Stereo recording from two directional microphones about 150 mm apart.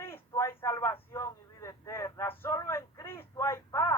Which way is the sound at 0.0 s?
15° left (ahead or behind).